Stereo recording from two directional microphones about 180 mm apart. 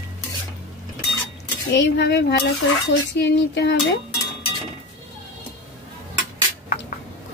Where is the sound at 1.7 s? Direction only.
70° left (ahead or behind).